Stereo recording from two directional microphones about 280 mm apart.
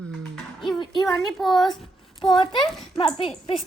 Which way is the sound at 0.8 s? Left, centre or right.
Centre.